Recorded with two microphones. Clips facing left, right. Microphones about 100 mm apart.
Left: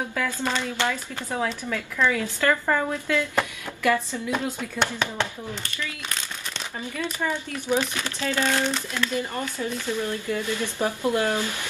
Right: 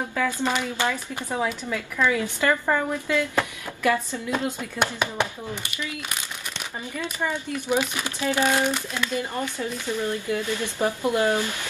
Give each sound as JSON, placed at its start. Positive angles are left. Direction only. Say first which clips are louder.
{"t": 0.4, "sound": "speech", "louder": "right 1 dB", "side_deg": -15}
{"t": 2.6, "sound": "a woman's voice", "louder": "even", "side_deg": -5}
{"t": 3.8, "sound": "speech", "louder": "even", "side_deg": -15}